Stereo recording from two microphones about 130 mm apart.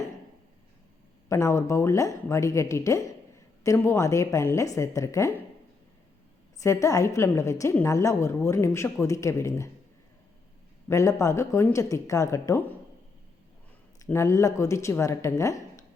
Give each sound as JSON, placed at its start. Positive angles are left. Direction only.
{"t": 1.3, "sound": "speech", "side_deg": 25}
{"t": 6.6, "sound": "speech", "side_deg": 25}
{"t": 10.8, "sound": "speech", "side_deg": 25}
{"t": 14.0, "sound": "speech", "side_deg": 20}